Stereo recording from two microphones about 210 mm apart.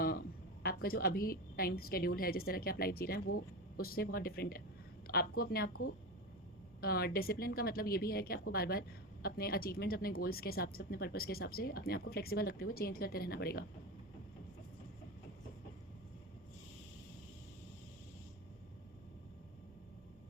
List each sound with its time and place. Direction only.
0.0 s a woman's voice: 45° left (ahead or behind)
5.6 s speech: 90° left
6.8 s speech: 45° left (ahead or behind)